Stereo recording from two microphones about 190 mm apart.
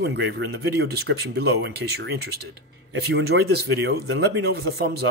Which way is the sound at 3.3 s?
70° right (ahead or behind).